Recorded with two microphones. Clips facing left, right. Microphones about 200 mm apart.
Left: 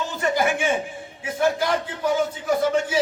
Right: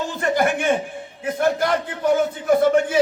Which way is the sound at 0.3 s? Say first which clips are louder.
Right 3 dB; 55° right (ahead or behind).